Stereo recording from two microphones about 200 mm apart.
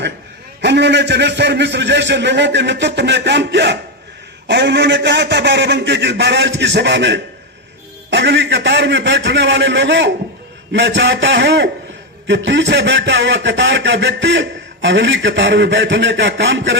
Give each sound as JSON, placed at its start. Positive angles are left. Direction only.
{"t": 0.6, "sound": "a man's voice", "side_deg": -60}